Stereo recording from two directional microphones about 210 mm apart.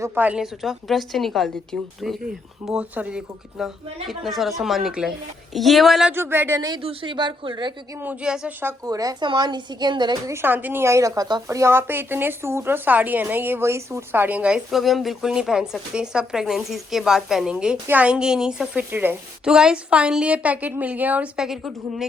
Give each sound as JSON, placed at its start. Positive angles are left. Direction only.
{"t": 0.0, "sound": "a woman's voice", "side_deg": -10}
{"t": 8.0, "sound": "a woman's voice", "side_deg": -5}